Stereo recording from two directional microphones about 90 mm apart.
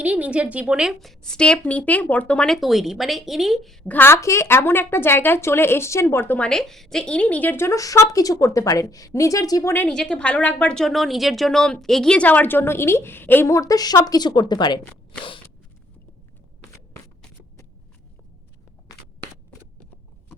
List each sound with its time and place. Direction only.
0.0 s a woman's voice: 15° right (ahead or behind)
1.2 s a woman's voice: 10° left (ahead or behind)
2.6 s speech: centre (ahead or behind)
3.8 s a woman's voice: 20° left (ahead or behind)
6.5 s a woman's voice: 5° left (ahead or behind); by 9.7 s 40° left (ahead or behind)
9.9 s a woman's voice: 10° left (ahead or behind); by 13.5 s 25° left (ahead or behind)
13.5 s a woman's voice: 40° left (ahead or behind); by 14.8 s 55° left (ahead or behind)
18.9 s a sound: 40° left (ahead or behind)